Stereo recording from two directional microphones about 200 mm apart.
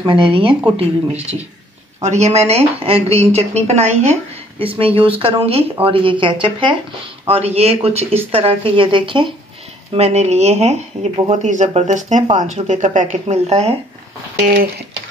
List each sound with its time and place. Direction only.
0.0 s speech: 25° right (ahead or behind)